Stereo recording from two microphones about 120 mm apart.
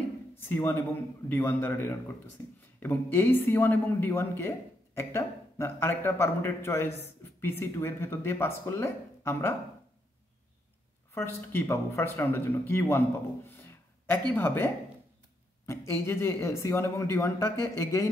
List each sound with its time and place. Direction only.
0.5 s speech: 20° left (ahead or behind)
11.1 s speech: 20° left (ahead or behind)
14.3 s speech: 15° left (ahead or behind)